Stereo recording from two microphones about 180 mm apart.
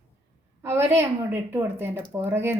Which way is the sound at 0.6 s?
15° right (ahead or behind).